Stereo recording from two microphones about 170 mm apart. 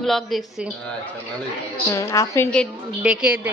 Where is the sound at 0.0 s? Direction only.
Centre (ahead or behind).